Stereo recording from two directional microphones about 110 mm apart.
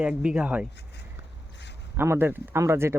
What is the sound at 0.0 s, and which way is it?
Speech, 10° right (ahead or behind).